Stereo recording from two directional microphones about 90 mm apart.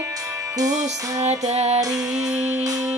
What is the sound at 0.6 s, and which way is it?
Music, 40° right (ahead or behind).